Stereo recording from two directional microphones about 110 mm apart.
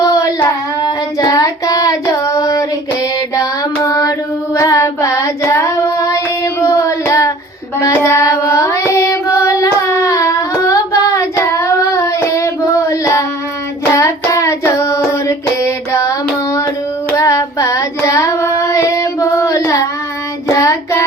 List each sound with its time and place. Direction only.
0.0 s child singing: 30° left (ahead or behind)
3.8 s child singing: 35° left (ahead or behind)
17.2 s child singing: 30° left (ahead or behind)